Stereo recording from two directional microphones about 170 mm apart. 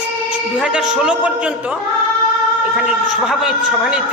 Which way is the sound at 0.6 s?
5° right (ahead or behind).